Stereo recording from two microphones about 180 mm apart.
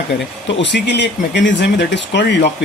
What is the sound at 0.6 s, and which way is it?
Speech, 75° left (ahead or behind).